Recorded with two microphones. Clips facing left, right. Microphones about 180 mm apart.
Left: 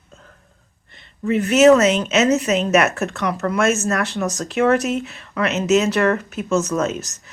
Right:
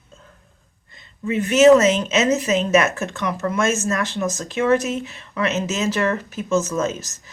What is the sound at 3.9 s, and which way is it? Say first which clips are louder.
Speech: left 1 dB; 65° left (ahead or behind).